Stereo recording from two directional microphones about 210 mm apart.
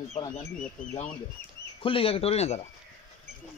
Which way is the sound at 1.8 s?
25° left (ahead or behind).